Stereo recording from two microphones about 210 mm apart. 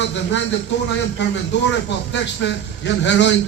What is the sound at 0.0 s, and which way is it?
Speech, 60° left (ahead or behind).